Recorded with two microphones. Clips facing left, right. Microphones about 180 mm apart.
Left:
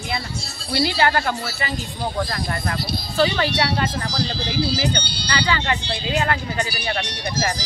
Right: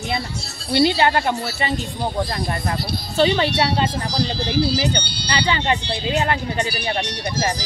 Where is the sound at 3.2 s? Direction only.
25° right (ahead or behind).